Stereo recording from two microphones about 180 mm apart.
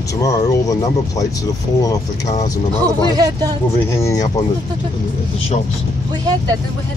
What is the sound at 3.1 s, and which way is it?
Speech, 20° right (ahead or behind).